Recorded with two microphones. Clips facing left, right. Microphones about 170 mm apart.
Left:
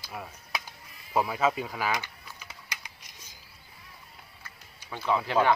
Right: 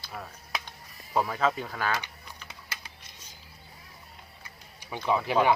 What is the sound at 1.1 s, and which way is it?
Speech, 10° left (ahead or behind).